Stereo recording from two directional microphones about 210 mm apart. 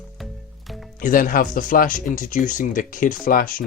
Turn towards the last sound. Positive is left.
turn(degrees=45)  # may be behind; listen again after turning